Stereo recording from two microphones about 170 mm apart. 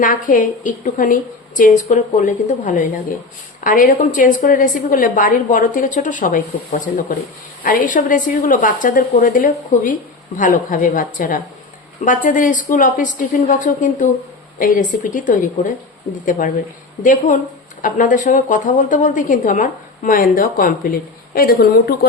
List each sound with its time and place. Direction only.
0.0 s a woman's voice: 50° left (ahead or behind)
17.0 s a woman's voice: 50° left (ahead or behind)